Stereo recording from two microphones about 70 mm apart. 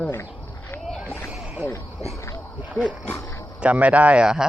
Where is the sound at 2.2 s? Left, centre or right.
Left.